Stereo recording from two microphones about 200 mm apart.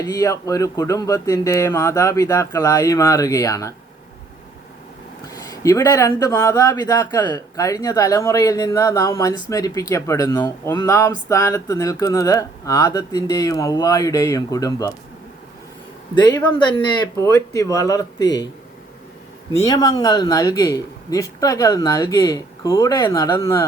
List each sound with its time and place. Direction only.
0.0 s speech: 15° left (ahead or behind)
5.3 s speech: 15° left (ahead or behind)
16.1 s speech: 20° left (ahead or behind)
19.6 s speech: 20° left (ahead or behind)